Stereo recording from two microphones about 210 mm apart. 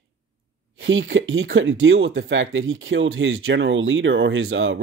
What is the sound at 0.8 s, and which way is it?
Speech, 65° right (ahead or behind).